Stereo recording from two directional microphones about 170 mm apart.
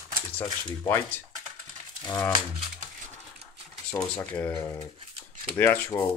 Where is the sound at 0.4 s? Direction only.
15° left (ahead or behind).